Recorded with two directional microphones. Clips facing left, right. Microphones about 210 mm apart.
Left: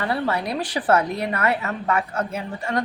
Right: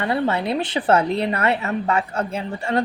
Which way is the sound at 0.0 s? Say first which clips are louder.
Right 3 dB; 25° right (ahead or behind).